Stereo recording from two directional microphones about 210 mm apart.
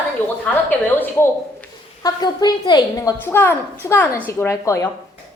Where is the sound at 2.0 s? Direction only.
20° left (ahead or behind).